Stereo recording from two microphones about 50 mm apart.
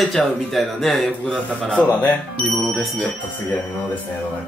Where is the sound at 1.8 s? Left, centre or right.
Left.